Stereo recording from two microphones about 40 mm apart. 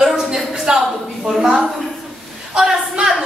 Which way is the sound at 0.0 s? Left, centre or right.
Centre.